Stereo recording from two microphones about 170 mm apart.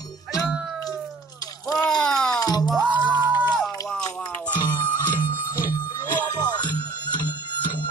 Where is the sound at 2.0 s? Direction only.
5° left (ahead or behind).